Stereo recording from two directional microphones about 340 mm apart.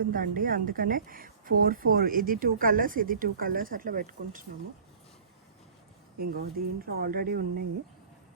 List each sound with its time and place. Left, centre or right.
0.0 s a woman's voice: right
6.1 s a woman's voice: right